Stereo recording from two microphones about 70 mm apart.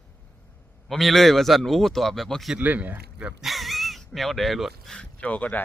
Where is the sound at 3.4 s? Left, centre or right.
Centre.